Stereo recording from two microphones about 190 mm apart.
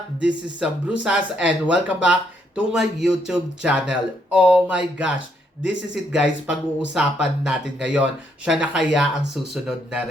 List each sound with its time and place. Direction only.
0.2 s speech: 5° right (ahead or behind)